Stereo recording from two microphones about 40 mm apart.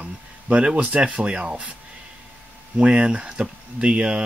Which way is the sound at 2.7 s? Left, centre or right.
Right.